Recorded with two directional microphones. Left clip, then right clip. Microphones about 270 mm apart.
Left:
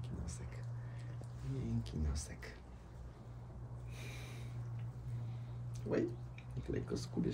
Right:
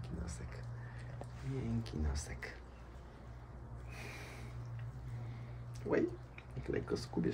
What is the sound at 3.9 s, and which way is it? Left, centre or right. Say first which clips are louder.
Snort: right 3 dB; centre.